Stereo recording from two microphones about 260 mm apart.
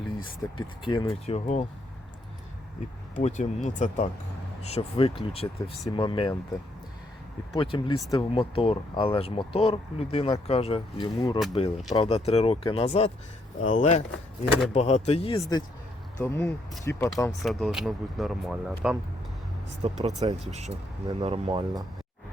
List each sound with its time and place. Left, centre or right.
0.5 s speech: centre
3.2 s speech: left
7.5 s speech: centre
19.8 s speech: right